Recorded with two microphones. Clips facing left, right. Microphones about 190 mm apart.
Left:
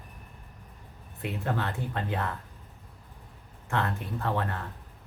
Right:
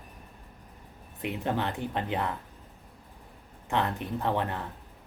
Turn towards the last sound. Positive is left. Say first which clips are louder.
# right 2 dB
turn(degrees=-20)  # may be behind; listen again after turning